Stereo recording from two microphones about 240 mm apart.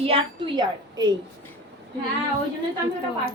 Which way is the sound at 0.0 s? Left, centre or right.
Right.